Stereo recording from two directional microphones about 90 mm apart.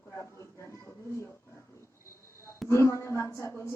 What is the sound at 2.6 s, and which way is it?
A woman's voice, 30° left (ahead or behind).